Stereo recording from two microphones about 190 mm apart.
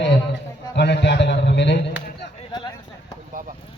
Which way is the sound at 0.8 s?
60° left (ahead or behind).